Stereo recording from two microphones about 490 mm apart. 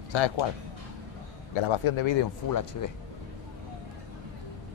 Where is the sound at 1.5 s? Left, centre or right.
Left.